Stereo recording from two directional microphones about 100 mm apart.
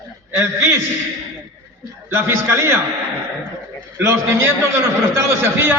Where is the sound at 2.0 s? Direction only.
25° right (ahead or behind).